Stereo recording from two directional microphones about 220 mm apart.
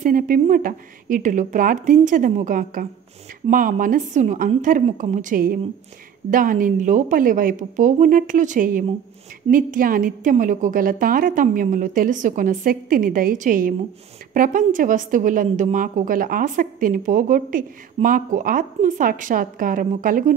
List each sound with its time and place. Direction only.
0.0 s a woman's voice: 40° right (ahead or behind)